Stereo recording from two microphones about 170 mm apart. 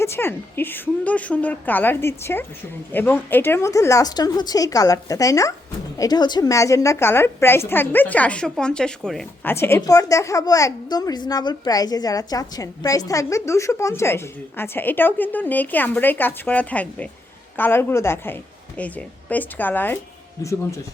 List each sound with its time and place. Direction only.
0.0 s a woman's voice: 15° left (ahead or behind)